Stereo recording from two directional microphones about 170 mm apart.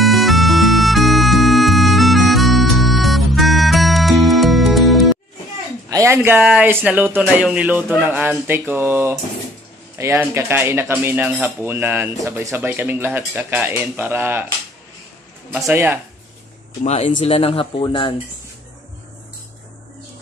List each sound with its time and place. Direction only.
0.0 s music: centre (ahead or behind)
5.9 s speech: 15° right (ahead or behind)
11.2 s speech: centre (ahead or behind)
15.5 s speech: 10° right (ahead or behind)
16.8 s speech: 40° left (ahead or behind)